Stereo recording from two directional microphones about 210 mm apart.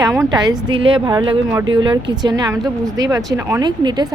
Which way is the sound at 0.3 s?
20° right (ahead or behind).